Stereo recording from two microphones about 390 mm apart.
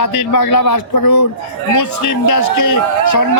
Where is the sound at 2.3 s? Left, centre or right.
Left.